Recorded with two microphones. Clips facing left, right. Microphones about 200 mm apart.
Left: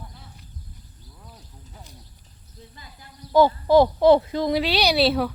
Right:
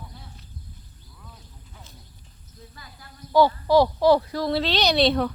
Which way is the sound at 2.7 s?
20° left (ahead or behind).